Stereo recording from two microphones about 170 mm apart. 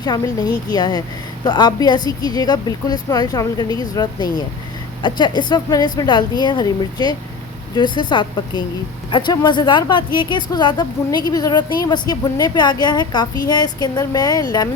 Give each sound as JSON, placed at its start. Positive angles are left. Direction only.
{"t": 0.0, "sound": "speech", "side_deg": 25}